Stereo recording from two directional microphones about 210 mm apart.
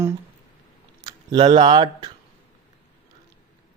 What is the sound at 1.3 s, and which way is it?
Speech, 20° right (ahead or behind).